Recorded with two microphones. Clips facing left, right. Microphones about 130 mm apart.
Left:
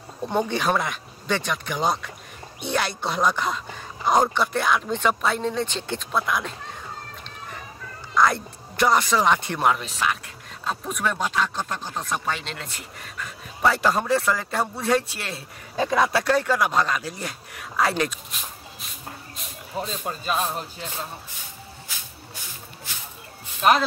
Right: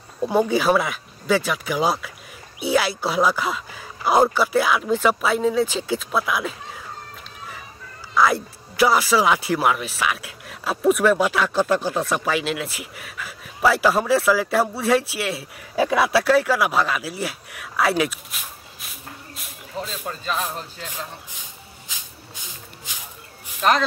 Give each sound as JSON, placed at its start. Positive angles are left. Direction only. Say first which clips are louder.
{"t": 0.3, "sound": "speech", "louder": "right 5 dB", "side_deg": -5}
{"t": 8.1, "sound": "speech", "louder": "right 2 dB", "side_deg": -5}
{"t": 11.5, "sound": "speech", "louder": "right 10 dB", "side_deg": -80}
{"t": 12.3, "sound": "speech", "louder": "right 6 dB", "side_deg": -5}
{"t": 19.8, "sound": "speech", "louder": "left 1 dB", "side_deg": 20}